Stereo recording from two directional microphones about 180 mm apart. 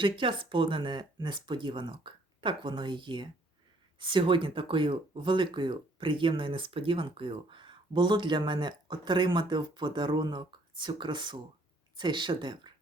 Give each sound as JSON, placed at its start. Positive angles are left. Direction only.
{"t": 0.0, "sound": "speech", "side_deg": -30}